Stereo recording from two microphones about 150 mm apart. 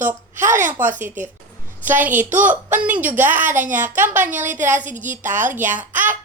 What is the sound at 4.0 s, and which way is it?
Speech, 15° right (ahead or behind).